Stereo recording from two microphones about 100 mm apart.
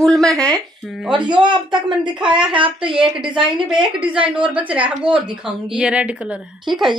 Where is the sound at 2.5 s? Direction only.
60° right (ahead or behind).